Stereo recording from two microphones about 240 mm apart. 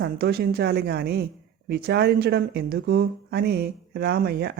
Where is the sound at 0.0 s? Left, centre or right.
Right.